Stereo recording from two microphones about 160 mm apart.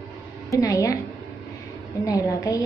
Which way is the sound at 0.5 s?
20° left (ahead or behind).